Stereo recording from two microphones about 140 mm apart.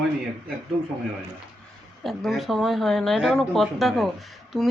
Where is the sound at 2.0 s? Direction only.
Centre (ahead or behind).